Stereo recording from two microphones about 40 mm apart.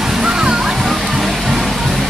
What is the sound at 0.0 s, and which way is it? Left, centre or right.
Music, centre.